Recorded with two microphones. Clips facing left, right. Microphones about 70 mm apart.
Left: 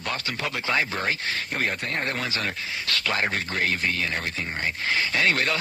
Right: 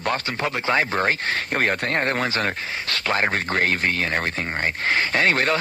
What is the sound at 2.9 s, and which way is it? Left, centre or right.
Speech, right.